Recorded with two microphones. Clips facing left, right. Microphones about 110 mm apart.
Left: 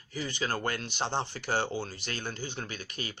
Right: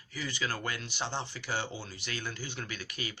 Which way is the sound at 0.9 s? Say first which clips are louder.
Left 4 dB; 30° left (ahead or behind).